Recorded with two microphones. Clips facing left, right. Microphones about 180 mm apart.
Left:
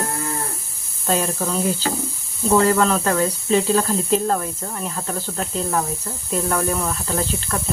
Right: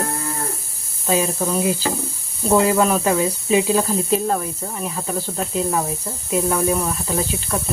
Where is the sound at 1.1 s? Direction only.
10° right (ahead or behind).